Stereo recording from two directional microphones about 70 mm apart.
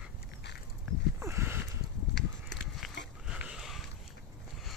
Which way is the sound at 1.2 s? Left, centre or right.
Right.